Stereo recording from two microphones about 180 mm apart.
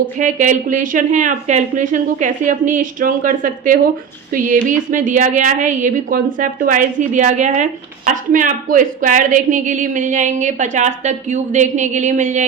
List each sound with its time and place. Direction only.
0.2 s a woman's voice: 45° right (ahead or behind)